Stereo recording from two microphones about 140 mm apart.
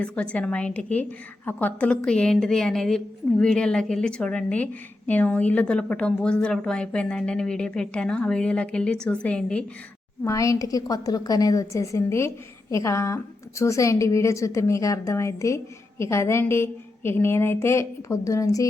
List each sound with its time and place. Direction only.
0.0 s a woman's voice: 10° left (ahead or behind)
10.2 s a woman's voice: 20° left (ahead or behind)